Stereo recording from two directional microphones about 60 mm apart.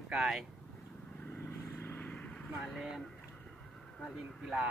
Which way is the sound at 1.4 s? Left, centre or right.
Left.